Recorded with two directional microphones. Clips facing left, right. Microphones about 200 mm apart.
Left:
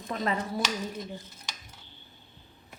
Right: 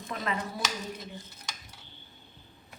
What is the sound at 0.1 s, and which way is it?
Speech, 35° left (ahead or behind).